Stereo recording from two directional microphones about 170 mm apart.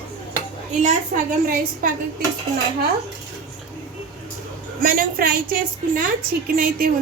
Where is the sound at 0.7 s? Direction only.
45° right (ahead or behind).